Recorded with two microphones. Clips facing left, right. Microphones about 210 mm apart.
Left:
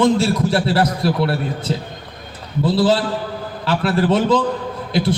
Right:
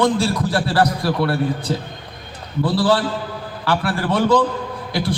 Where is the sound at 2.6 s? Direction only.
25° left (ahead or behind).